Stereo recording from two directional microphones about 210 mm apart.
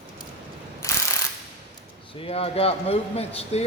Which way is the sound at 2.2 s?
25° left (ahead or behind).